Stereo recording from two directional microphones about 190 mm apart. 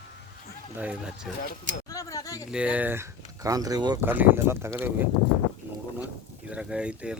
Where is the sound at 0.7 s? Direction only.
5° right (ahead or behind).